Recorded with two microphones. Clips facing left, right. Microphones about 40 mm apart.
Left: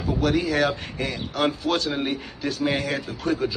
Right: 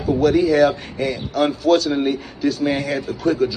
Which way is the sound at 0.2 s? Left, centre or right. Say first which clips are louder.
Right 7 dB; left.